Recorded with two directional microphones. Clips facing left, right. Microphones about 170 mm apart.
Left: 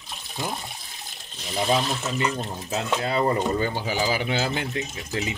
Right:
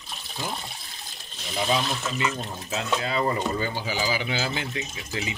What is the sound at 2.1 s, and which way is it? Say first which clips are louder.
Speech: left 2 dB; 40° left (ahead or behind).